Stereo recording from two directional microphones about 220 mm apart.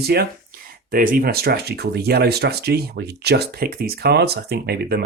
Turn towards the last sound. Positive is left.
turn(degrees=-45)  # may be behind; listen again after turning